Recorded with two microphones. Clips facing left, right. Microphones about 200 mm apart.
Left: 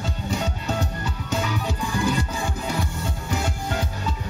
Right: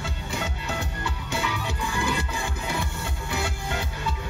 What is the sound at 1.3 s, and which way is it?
Music, 40° left (ahead or behind).